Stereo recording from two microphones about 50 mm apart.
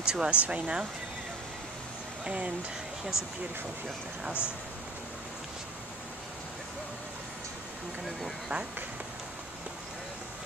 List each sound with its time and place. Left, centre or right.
0.0 s speech: centre
2.2 s speech: right
3.1 s speech: left